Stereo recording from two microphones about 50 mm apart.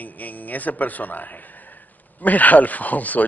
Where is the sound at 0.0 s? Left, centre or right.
Left.